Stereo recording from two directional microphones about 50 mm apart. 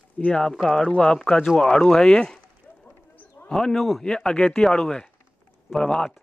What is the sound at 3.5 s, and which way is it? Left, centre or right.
Speech, centre.